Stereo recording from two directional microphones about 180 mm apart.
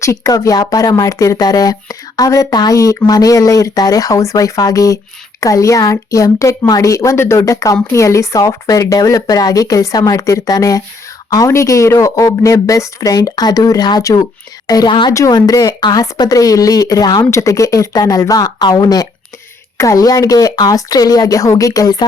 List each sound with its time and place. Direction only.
0.0 s a woman's voice: 20° left (ahead or behind)